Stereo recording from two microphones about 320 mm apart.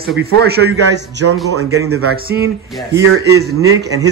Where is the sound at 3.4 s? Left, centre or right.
Right.